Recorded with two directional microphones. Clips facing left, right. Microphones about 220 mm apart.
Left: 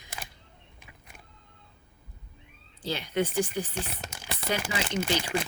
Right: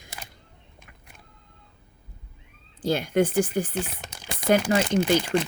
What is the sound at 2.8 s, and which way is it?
Speech, 50° right (ahead or behind).